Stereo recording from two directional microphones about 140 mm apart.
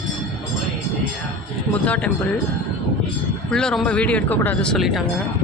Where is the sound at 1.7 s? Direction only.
10° left (ahead or behind).